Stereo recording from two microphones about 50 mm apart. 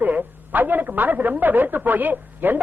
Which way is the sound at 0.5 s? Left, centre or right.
Right.